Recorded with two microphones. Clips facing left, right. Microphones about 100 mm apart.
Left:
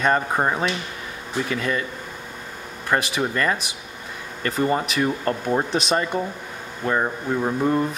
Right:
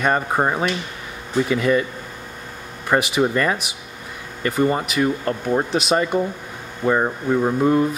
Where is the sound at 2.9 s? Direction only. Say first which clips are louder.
Right 4 dB; 15° right (ahead or behind).